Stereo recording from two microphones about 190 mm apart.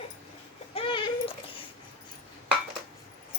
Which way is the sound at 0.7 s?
30° left (ahead or behind).